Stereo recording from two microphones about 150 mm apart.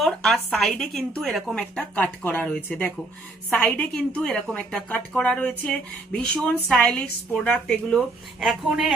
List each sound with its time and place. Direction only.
0.0 s a woman's voice: centre (ahead or behind)